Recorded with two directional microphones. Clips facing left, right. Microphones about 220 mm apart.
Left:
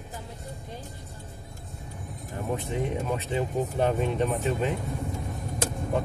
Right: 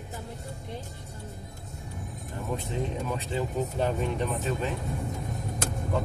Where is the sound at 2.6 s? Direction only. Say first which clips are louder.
Left 2 dB; 15° left (ahead or behind).